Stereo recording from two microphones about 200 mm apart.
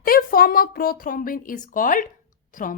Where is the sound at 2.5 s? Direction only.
40° left (ahead or behind).